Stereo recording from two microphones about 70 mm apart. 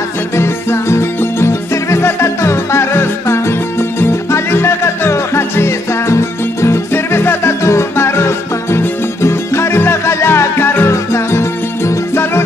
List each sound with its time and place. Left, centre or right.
0.4 s music: left
10.9 s music: left